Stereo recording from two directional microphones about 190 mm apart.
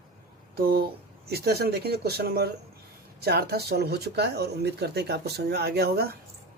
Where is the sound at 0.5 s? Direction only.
50° right (ahead or behind).